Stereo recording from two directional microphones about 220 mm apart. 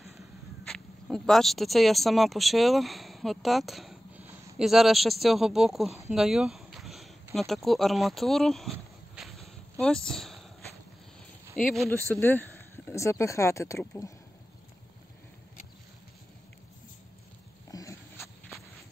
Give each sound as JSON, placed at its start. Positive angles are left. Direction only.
{"t": 0.7, "sound": "speech", "side_deg": 0}
{"t": 6.1, "sound": "a sound", "side_deg": 0}
{"t": 7.3, "sound": "speech", "side_deg": 0}
{"t": 8.7, "sound": "a sound", "side_deg": 0}
{"t": 11.5, "sound": "speech", "side_deg": 0}
{"t": 17.6, "sound": "dog", "side_deg": 15}